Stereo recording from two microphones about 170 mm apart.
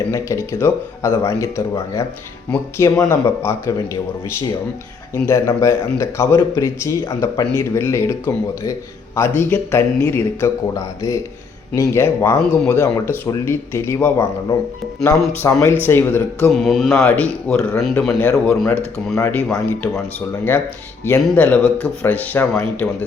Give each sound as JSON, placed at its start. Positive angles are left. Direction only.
{"t": 0.1, "sound": "a man's voice", "side_deg": 15}
{"t": 5.1, "sound": "a man's voice", "side_deg": 15}
{"t": 16.5, "sound": "speech", "side_deg": 0}
{"t": 16.9, "sound": "a man's voice", "side_deg": 10}